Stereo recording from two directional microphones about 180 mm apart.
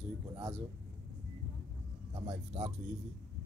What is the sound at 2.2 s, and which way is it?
Speech, 30° right (ahead or behind).